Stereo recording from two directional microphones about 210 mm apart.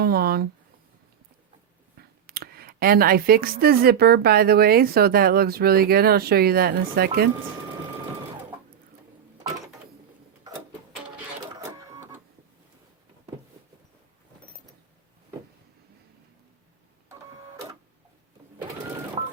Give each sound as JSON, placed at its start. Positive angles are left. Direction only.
{"t": 0.0, "sound": "speech", "side_deg": -45}
{"t": 2.0, "sound": "speech", "side_deg": -45}
{"t": 11.9, "sound": "printer", "side_deg": -15}